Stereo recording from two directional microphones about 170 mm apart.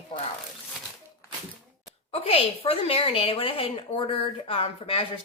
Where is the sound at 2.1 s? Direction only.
35° left (ahead or behind).